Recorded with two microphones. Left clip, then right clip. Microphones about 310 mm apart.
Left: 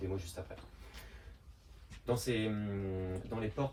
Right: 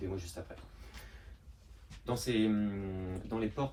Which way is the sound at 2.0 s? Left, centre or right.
Centre.